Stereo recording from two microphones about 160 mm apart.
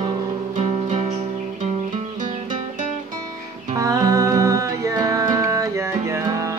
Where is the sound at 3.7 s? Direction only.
20° right (ahead or behind).